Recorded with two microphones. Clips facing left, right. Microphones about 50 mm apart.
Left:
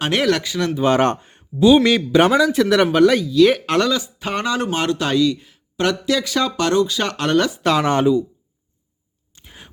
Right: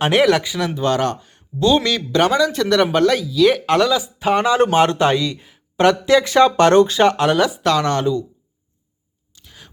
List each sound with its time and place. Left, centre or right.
0.0 s speech: centre
0.9 s speech: left
1.5 s speech: centre
4.7 s speech: right
7.2 s speech: centre
7.6 s speech: centre
9.3 s a sound: left